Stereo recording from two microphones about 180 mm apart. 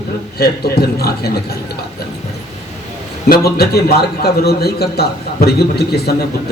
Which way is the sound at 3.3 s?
60° left (ahead or behind).